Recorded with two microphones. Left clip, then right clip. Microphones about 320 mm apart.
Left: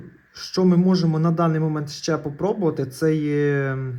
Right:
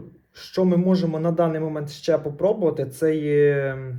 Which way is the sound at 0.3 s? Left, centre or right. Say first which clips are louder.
Left 1 dB; centre.